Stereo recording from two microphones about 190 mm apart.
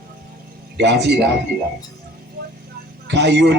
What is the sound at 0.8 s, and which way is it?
Speech, 65° right (ahead or behind).